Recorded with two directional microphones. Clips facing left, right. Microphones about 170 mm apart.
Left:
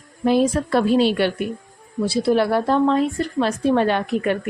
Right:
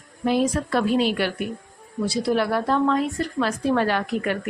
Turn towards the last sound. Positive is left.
turn(degrees=25)  # may be behind; listen again after turning